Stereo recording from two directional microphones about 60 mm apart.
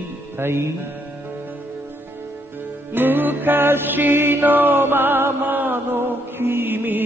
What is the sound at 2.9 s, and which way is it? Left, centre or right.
Music, right.